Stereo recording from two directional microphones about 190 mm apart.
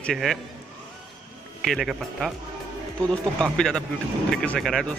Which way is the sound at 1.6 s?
Centre (ahead or behind).